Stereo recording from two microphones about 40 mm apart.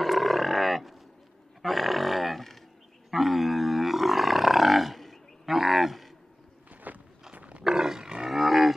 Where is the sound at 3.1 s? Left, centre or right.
Centre.